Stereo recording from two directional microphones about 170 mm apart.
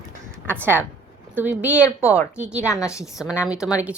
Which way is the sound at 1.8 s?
15° left (ahead or behind).